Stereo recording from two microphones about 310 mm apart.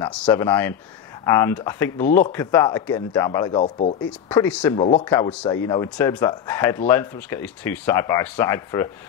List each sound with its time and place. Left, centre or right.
0.2 s speech: centre
3.6 s speech: left
4.3 s speech: centre